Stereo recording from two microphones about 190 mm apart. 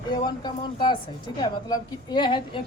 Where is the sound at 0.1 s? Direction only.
25° left (ahead or behind).